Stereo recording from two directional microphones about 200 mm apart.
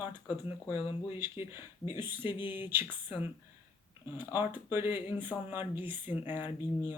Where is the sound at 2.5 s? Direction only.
10° right (ahead or behind).